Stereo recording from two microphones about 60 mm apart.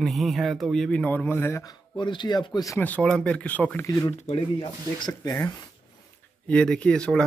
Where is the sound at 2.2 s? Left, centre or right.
Left.